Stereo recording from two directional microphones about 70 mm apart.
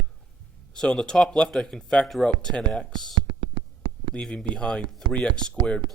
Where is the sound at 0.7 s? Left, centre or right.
Centre.